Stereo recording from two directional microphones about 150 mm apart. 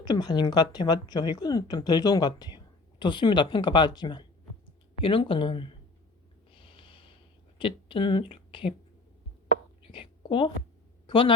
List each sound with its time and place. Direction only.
0.0 s a woman's voice: 30° left (ahead or behind)
6.5 s snort: 35° left (ahead or behind)
7.6 s a woman's voice: 35° left (ahead or behind)
9.8 s a sound: 35° left (ahead or behind)